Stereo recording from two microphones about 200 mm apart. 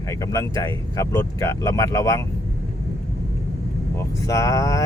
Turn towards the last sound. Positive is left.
turn(degrees=15)  # may be behind; listen again after turning